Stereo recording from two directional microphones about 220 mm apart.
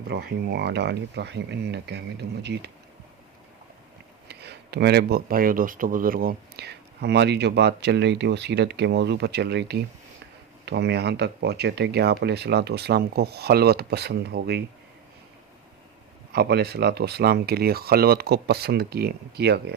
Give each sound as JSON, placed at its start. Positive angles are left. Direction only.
{"t": 0.1, "sound": "speech", "side_deg": -50}
{"t": 4.3, "sound": "speech", "side_deg": -50}
{"t": 16.3, "sound": "speech", "side_deg": -45}